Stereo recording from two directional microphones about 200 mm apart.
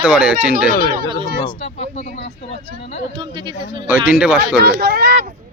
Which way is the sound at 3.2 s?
25° right (ahead or behind).